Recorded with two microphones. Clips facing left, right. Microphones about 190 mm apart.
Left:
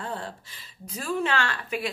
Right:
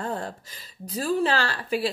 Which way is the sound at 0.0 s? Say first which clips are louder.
Right 4 dB; 45° right (ahead or behind).